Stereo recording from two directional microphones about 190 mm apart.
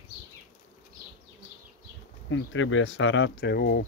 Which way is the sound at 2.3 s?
90° left.